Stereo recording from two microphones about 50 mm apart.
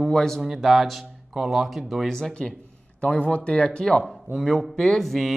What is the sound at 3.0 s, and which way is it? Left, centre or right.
Speech, left.